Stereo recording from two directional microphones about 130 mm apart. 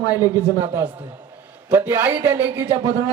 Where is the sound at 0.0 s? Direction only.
30° left (ahead or behind).